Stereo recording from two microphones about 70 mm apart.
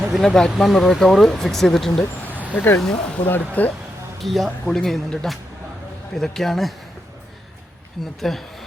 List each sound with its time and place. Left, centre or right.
0.1 s speech: centre
2.0 s vehicle: left
2.8 s speech: centre
3.2 s speech: left
4.2 s speech: centre
8.2 s speech: centre